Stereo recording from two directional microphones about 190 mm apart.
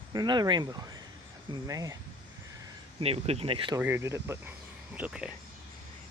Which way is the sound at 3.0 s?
30° right (ahead or behind).